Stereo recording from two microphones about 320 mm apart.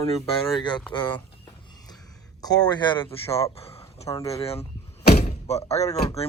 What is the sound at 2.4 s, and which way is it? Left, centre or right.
Speech, centre.